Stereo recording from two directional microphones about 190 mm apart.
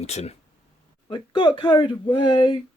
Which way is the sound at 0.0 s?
35° left (ahead or behind).